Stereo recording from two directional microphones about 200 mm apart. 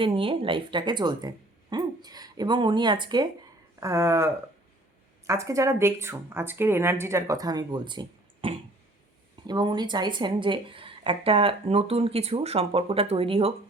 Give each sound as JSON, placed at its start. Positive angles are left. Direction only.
{"t": 0.0, "sound": "a woman's voice", "side_deg": -25}